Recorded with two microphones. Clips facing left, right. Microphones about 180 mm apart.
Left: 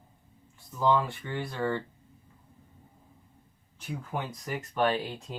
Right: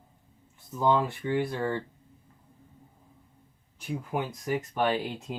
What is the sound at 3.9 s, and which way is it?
Speech, 10° right (ahead or behind).